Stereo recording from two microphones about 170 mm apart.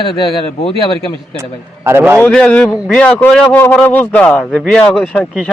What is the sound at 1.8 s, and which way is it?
Speech, 15° right (ahead or behind).